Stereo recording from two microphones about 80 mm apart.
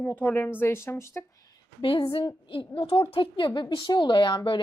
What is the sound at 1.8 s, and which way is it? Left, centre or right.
A woman's voice, left.